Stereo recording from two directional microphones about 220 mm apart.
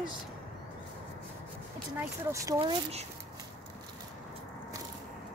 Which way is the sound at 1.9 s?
15° right (ahead or behind).